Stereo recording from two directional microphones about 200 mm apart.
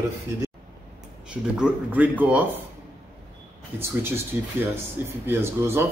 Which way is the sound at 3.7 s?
10° right (ahead or behind).